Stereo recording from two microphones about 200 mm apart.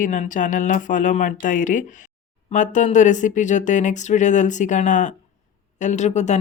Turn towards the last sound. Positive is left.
turn(degrees=35)  # may be behind; listen again after turning